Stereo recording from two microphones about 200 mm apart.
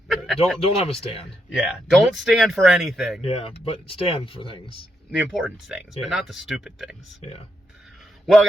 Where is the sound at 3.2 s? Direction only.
30° left (ahead or behind).